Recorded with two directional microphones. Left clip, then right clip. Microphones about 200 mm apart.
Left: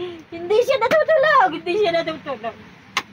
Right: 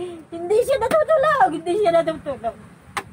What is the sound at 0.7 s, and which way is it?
A woman's voice, 15° left (ahead or behind).